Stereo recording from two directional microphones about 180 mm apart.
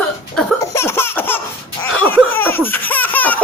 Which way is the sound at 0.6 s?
15° left (ahead or behind).